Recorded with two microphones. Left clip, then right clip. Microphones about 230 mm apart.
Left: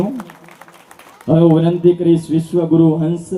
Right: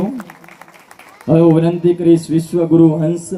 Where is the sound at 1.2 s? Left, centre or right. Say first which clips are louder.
Right 1 dB; right.